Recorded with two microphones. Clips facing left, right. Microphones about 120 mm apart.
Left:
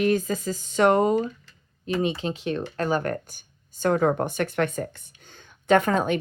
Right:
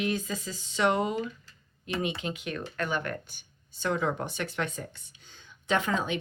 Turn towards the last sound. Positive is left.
turn(degrees=50)  # may be behind; listen again after turning